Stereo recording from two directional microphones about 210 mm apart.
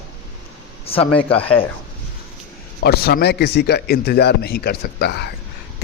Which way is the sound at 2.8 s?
50° left (ahead or behind).